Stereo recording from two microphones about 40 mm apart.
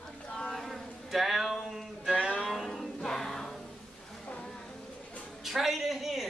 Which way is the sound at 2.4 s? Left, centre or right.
Centre.